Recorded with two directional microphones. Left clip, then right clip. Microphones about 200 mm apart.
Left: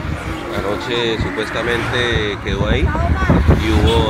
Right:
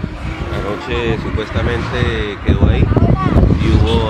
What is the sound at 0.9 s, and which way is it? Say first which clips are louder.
Speech: right 1 dB; 5° right (ahead or behind).